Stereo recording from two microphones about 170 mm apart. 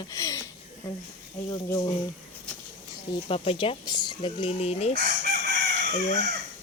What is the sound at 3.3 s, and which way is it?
Speech, 35° left (ahead or behind).